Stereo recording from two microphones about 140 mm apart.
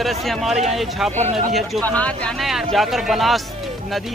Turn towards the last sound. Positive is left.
turn(degrees=0)  # may be behind; listen again after turning